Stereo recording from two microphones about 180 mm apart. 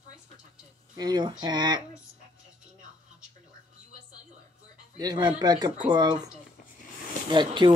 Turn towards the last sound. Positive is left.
turn(degrees=-25)  # may be behind; listen again after turning